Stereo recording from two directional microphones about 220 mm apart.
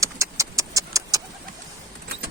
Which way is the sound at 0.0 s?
15° right (ahead or behind).